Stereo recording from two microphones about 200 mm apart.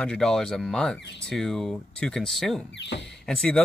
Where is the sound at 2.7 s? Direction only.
60° left (ahead or behind).